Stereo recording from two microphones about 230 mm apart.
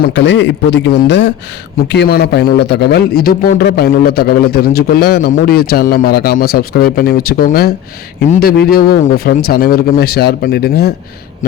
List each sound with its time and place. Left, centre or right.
0.0 s a man's voice: left